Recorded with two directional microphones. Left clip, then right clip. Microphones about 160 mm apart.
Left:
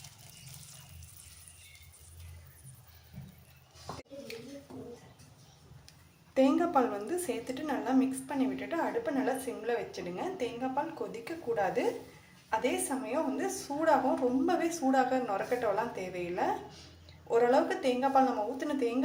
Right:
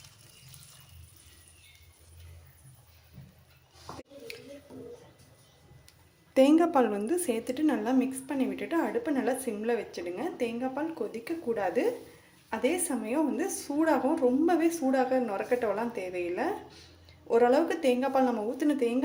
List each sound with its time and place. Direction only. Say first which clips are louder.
6.3 s a woman's voice: right 4 dB; 40° right (ahead or behind)